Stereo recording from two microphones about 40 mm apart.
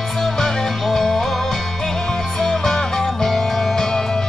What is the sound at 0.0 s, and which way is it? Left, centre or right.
Music, centre.